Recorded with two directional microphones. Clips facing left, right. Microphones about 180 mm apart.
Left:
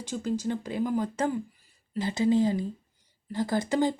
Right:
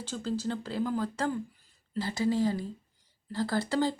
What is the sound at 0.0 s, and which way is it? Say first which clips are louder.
A woman's voice: left 3 dB; 15° left (ahead or behind).